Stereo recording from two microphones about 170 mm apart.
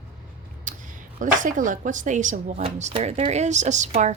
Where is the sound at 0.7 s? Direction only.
50° right (ahead or behind).